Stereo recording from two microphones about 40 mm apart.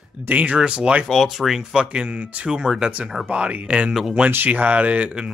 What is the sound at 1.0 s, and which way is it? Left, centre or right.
Speech, centre.